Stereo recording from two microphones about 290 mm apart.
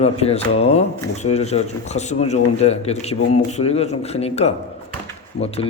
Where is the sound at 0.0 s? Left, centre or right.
Left.